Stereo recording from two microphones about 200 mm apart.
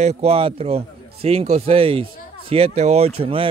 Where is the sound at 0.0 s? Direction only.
30° right (ahead or behind).